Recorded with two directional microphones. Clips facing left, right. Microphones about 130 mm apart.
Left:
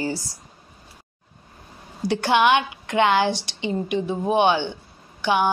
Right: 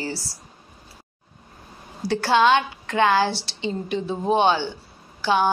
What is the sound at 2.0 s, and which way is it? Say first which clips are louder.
A woman's voice: even; 15° left (ahead or behind).